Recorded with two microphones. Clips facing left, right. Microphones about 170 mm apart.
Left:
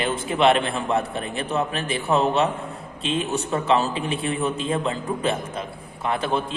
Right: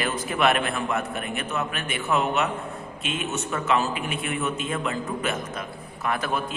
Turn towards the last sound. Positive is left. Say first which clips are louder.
# left 3 dB
turn(degrees=25)  # may be behind; listen again after turning